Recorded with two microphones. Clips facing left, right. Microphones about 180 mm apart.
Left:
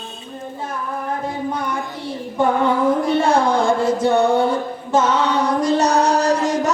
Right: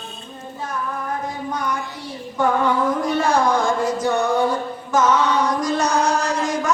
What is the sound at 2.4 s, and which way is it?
Music, 25° left (ahead or behind).